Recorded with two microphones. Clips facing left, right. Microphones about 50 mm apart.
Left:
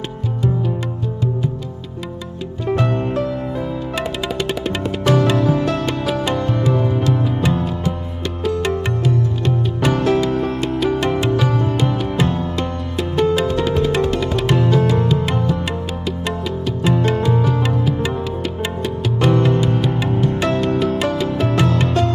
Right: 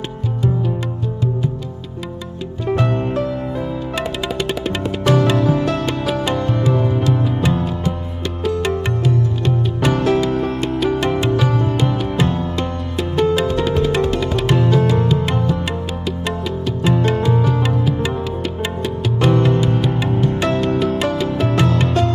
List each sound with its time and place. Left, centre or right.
2.6 s music: right